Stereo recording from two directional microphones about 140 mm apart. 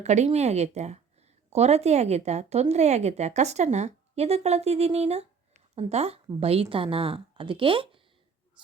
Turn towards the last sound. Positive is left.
turn(degrees=-40)  # may be behind; listen again after turning